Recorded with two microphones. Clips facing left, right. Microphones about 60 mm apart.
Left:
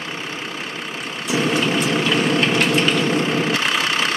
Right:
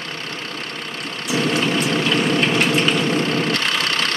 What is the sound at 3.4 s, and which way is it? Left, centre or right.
Vehicle, centre.